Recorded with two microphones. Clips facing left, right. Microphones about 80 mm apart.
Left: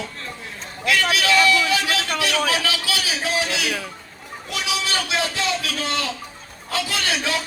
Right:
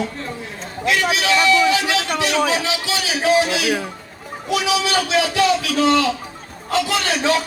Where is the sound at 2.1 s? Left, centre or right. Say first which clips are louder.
Right 2 dB; right.